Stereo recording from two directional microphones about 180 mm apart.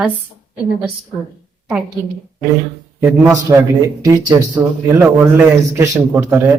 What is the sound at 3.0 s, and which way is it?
A man's voice, 15° right (ahead or behind).